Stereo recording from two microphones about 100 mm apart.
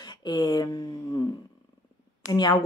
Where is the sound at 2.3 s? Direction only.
45° left (ahead or behind).